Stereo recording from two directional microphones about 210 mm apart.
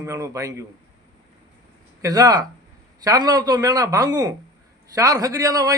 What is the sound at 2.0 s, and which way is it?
Speech, 15° right (ahead or behind).